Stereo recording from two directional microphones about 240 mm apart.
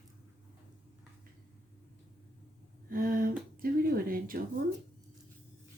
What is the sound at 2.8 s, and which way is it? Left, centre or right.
Speech, right.